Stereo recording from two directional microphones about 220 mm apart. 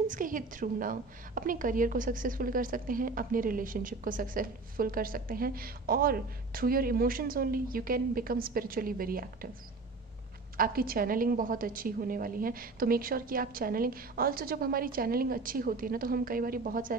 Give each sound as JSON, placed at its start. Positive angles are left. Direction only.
{"t": 0.1, "sound": "a woman's voice", "side_deg": -35}
{"t": 10.6, "sound": "a woman's voice", "side_deg": -40}